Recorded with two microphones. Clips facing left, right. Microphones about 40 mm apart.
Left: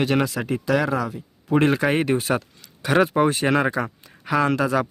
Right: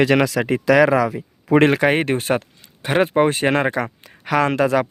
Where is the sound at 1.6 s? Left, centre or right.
Right.